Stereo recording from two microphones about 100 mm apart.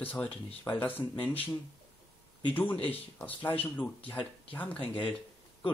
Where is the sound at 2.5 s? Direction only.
15° left (ahead or behind).